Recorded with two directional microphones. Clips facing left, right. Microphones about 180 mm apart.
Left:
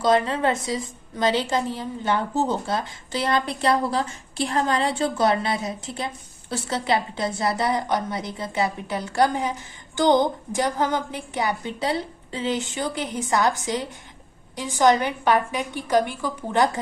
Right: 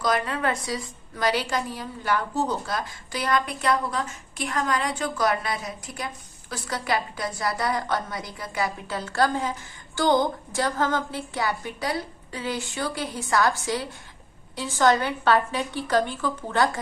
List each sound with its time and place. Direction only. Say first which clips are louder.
0.0 s a woman's voice: left 5 dB; 25° left (ahead or behind)